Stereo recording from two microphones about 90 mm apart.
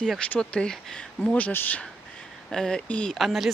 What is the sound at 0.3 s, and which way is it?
Speech, 10° left (ahead or behind).